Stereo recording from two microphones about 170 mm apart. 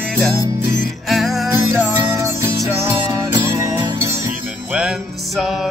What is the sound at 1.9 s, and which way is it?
Music, 20° right (ahead or behind).